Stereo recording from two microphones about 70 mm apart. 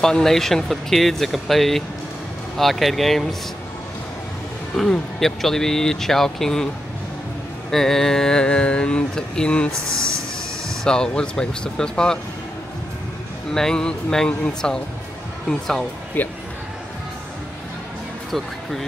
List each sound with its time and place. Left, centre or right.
0.0 s speech: centre
4.7 s speech: centre
7.7 s mantra: centre
9.7 s speech: right
10.8 s mantra: centre
13.5 s mantra: centre
16.2 s speech: left
18.3 s speech: centre